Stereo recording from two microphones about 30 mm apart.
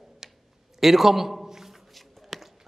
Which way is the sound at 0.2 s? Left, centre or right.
Centre.